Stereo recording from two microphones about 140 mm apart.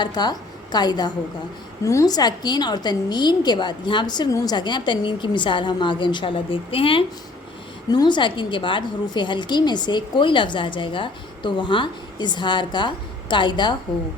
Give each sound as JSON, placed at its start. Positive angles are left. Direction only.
{"t": 0.0, "sound": "a woman's voice", "side_deg": 30}